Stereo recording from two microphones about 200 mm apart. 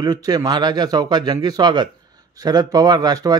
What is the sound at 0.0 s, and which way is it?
A man's voice, 20° right (ahead or behind).